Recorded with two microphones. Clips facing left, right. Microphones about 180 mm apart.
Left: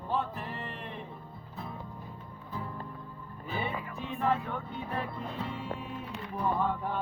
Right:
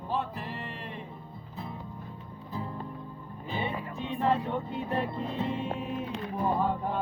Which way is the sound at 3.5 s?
30° right (ahead or behind).